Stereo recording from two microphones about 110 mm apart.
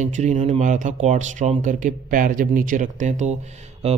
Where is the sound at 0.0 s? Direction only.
90° right.